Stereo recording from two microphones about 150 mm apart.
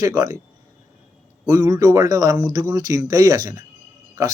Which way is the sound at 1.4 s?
20° right (ahead or behind).